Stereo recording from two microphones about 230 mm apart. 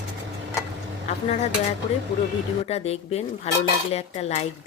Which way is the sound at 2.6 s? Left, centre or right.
Left.